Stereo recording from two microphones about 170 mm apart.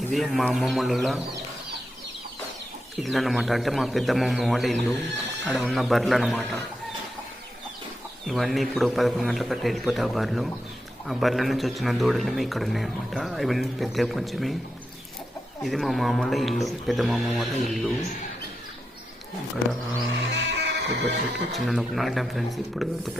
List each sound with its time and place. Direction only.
0.1 s a man's voice: centre (ahead or behind)
3.0 s a man's voice: centre (ahead or behind)
8.3 s a man's voice: centre (ahead or behind)
15.6 s a man's voice: centre (ahead or behind)
20.3 s music: 90° right
21.5 s a man's voice: centre (ahead or behind)